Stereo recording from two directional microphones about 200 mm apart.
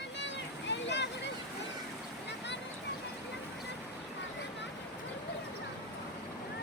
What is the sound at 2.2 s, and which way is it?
Boat, 60° left (ahead or behind).